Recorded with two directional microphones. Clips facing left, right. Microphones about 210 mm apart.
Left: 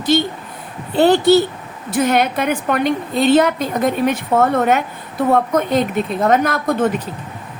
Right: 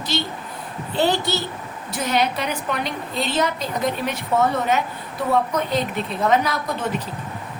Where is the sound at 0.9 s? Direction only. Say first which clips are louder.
Left 10 dB; 55° left (ahead or behind).